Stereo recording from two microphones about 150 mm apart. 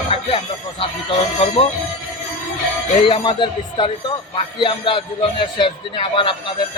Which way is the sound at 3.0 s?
30° left (ahead or behind).